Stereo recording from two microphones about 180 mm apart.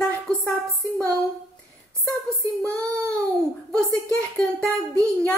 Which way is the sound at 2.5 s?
5° left (ahead or behind).